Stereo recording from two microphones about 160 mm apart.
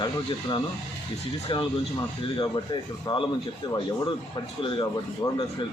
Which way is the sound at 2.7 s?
30° left (ahead or behind).